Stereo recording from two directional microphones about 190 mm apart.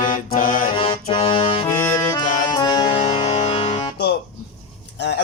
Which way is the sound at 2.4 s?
20° left (ahead or behind).